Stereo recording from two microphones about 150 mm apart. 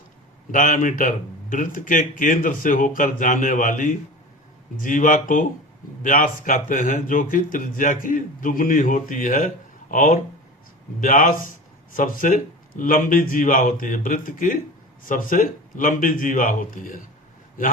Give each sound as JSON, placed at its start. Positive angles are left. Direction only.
{"t": 0.5, "sound": "speech", "side_deg": 60}